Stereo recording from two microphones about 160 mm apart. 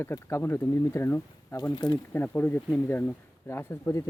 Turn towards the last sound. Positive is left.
turn(degrees=15)  # may be behind; listen again after turning